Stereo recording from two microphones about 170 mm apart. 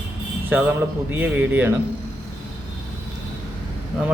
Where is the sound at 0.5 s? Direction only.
10° right (ahead or behind).